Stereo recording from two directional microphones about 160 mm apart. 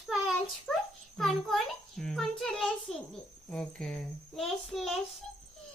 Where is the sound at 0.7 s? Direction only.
Centre (ahead or behind).